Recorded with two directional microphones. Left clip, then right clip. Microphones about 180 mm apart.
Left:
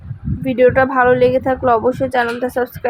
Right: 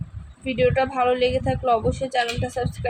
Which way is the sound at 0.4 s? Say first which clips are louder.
Left 8 dB; 30° left (ahead or behind).